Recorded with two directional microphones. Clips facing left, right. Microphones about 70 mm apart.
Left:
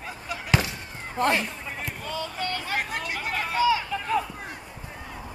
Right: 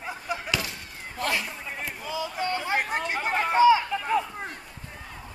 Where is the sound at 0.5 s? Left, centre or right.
Left.